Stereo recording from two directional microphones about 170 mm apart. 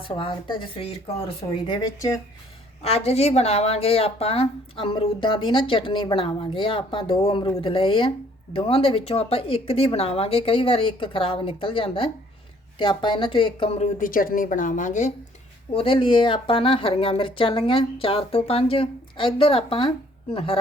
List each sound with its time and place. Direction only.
0.0 s speech: 30° left (ahead or behind)
1.6 s speech: 20° left (ahead or behind)
2.8 s a woman's voice: 35° left (ahead or behind)
15.7 s a woman's voice: 30° left (ahead or behind)